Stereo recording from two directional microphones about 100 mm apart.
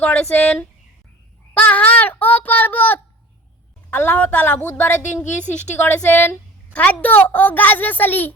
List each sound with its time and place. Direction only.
0.0 s a child's voice: 15° left (ahead or behind)